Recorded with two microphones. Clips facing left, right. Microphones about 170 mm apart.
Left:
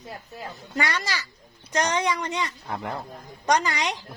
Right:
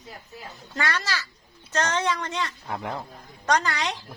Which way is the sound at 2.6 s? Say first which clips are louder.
Even; centre (ahead or behind).